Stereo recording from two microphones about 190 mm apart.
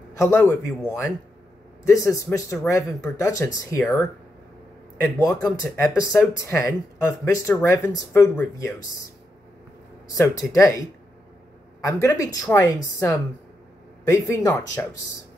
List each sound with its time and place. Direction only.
0.2 s speech: 15° left (ahead or behind)
5.2 s speech: 20° left (ahead or behind)
10.1 s speech: 15° left (ahead or behind)